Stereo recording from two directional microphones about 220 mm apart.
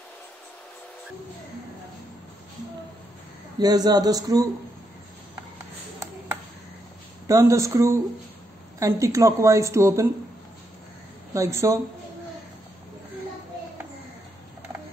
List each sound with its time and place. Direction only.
3.5 s a woman's voice: 15° right (ahead or behind)
7.2 s a woman's voice: 15° right (ahead or behind)
11.3 s a woman's voice: 15° right (ahead or behind)